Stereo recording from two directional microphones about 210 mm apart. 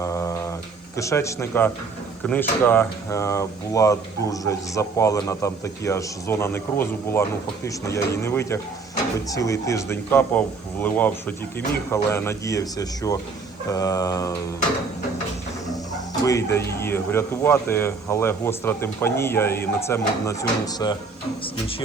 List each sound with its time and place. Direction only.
0.0 s mantra: 15° left (ahead or behind)
0.9 s speech: 15° left (ahead or behind)
16.2 s speech: 15° left (ahead or behind)